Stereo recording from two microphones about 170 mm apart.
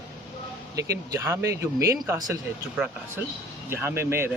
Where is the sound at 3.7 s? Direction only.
15° right (ahead or behind).